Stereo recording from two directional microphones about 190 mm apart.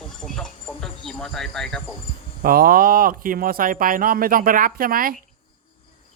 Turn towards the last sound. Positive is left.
turn(degrees=-50)  # may be behind; listen again after turning